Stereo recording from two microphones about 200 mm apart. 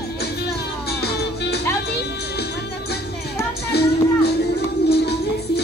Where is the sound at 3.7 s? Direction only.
55° left (ahead or behind).